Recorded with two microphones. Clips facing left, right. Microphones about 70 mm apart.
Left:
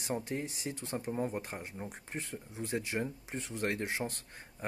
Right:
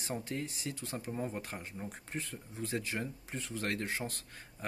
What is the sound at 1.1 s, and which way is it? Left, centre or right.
Speech, centre.